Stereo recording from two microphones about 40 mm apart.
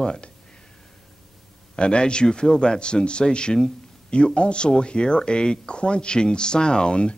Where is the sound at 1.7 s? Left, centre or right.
Left.